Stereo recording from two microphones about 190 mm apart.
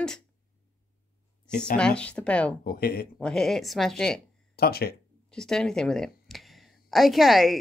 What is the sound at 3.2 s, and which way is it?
Speech, 5° left (ahead or behind).